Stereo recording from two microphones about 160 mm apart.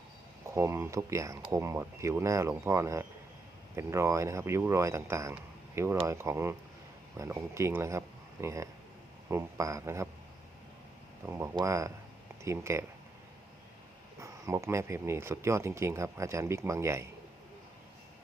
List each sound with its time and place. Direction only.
0.4 s speech: 15° right (ahead or behind)
11.5 s speech: 20° right (ahead or behind)
14.2 s speech: 20° right (ahead or behind)